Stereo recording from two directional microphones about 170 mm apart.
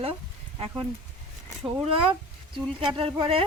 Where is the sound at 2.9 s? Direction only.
35° right (ahead or behind).